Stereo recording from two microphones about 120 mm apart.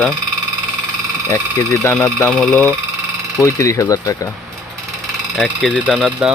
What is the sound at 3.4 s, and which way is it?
Speech, 25° left (ahead or behind).